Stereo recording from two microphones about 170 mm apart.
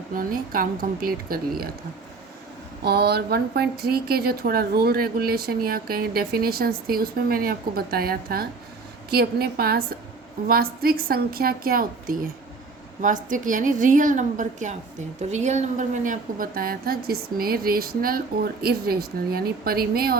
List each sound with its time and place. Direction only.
0.1 s a woman's voice: 55° right (ahead or behind)
2.8 s a woman's voice: 70° right (ahead or behind)